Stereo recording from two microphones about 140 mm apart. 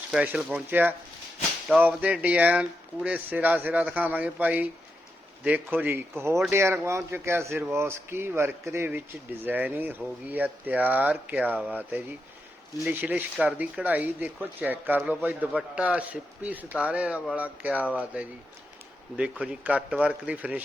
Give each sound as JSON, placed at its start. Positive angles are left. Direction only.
{"t": 0.1, "sound": "speech", "side_deg": -5}